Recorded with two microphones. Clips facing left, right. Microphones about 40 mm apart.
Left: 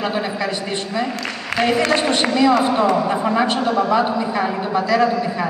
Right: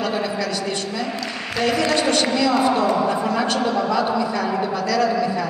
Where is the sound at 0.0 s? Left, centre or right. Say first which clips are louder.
Left 1 dB; left.